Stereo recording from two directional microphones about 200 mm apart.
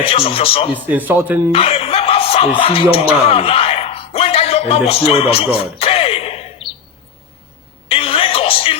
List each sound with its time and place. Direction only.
0.0 s speech: 30° left (ahead or behind)
0.9 s speech: 10° right (ahead or behind)
1.5 s speech: 30° left (ahead or behind)
7.9 s music: 25° left (ahead or behind)